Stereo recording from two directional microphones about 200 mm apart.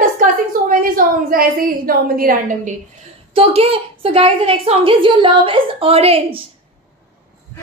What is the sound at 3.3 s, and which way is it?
A woman's voice, 30° right (ahead or behind).